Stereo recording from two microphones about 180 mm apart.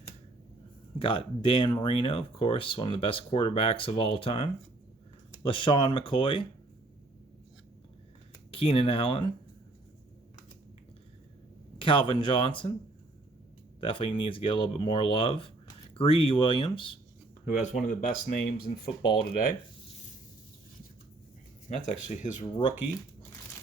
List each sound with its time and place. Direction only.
0.9 s speech: 30° left (ahead or behind)
8.4 s speech: 30° left (ahead or behind)
11.8 s speech: 25° left (ahead or behind)
13.8 s speech: 30° left (ahead or behind)
17.4 s speech: 40° left (ahead or behind)
21.7 s speech: 40° left (ahead or behind)